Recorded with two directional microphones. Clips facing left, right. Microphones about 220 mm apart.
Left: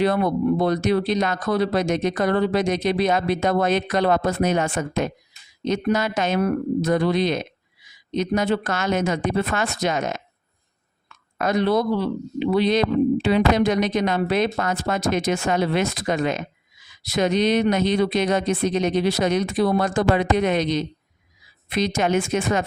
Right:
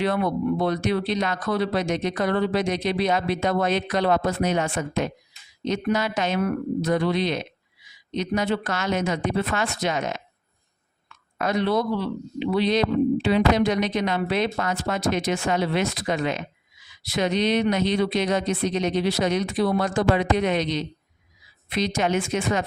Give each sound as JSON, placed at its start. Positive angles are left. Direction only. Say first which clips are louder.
{"t": 0.0, "sound": "speech", "louder": "left 3 dB", "side_deg": 40}
{"t": 11.3, "sound": "speech", "louder": "left 3 dB", "side_deg": 45}